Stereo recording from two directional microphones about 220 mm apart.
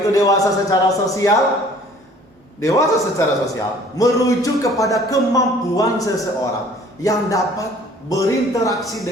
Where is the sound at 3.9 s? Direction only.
15° left (ahead or behind).